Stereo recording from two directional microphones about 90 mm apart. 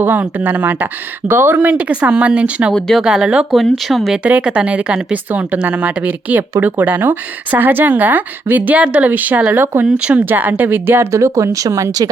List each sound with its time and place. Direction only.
0.0 s a woman's voice: 20° right (ahead or behind)
2.7 s speech: 5° left (ahead or behind)
3.0 s a woman's voice: 10° right (ahead or behind)
4.2 s a woman's voice: 15° right (ahead or behind); by 12.1 s 40° right (ahead or behind)